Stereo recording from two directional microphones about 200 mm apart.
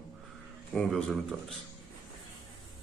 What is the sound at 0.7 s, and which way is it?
Speech, 5° left (ahead or behind).